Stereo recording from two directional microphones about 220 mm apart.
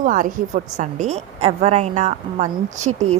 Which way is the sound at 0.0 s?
35° right (ahead or behind).